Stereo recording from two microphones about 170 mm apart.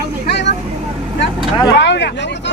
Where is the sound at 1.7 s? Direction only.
90° left.